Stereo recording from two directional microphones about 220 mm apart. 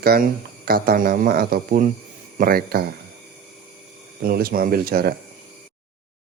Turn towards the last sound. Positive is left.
turn(degrees=-45)  # may be behind; listen again after turning